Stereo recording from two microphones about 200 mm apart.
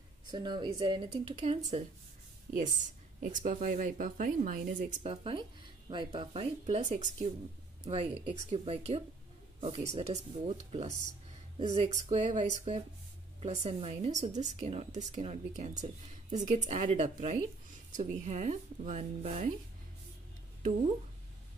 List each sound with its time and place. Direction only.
0.3 s speech: 20° right (ahead or behind)
2.6 s speech: 40° right (ahead or behind)
10.9 s speech: 40° left (ahead or behind)
11.5 s speech: 35° right (ahead or behind)